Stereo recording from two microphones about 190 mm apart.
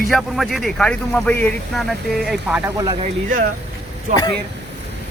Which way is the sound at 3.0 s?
45° right (ahead or behind).